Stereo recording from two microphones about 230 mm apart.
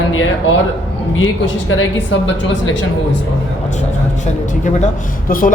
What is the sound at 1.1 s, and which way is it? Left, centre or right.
Speech, left.